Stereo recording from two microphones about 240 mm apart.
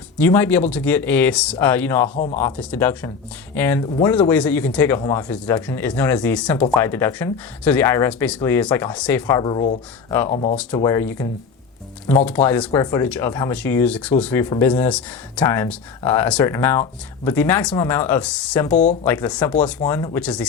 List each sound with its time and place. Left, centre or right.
0.2 s speech: centre; by 10.6 s left
10.8 s speech: centre